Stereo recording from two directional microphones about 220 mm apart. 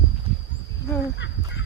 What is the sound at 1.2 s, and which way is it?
Fowl, 55° left (ahead or behind).